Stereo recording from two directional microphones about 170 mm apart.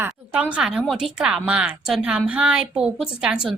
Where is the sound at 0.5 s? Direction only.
5° right (ahead or behind).